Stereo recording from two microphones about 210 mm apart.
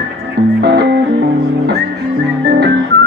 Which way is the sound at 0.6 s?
50° right (ahead or behind).